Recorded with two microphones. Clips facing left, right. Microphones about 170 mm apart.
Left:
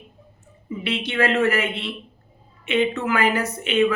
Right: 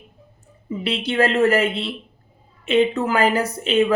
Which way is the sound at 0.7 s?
35° right (ahead or behind).